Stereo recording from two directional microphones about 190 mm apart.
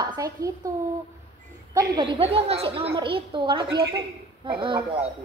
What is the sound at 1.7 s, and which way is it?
A woman's voice, 25° right (ahead or behind).